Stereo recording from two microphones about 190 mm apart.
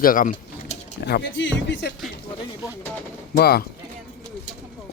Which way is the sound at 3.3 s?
55° left (ahead or behind).